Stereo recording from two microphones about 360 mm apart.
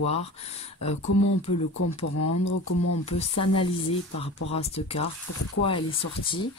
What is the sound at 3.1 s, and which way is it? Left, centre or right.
Speech, centre.